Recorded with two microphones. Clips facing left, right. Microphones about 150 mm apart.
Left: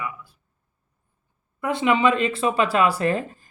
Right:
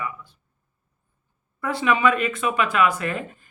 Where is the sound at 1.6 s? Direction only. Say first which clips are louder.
Left 1 dB; 20° left (ahead or behind).